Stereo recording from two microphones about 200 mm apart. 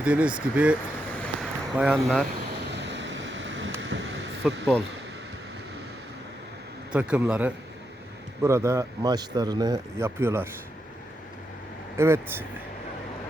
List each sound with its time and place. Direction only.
0.0 s speech: 5° right (ahead or behind)
1.2 s a sound: centre (ahead or behind)
2.7 s vehicle: 60° right (ahead or behind)
4.4 s a man's voice: centre (ahead or behind)
6.9 s a man's voice: 5° right (ahead or behind)
11.9 s speech: 10° right (ahead or behind)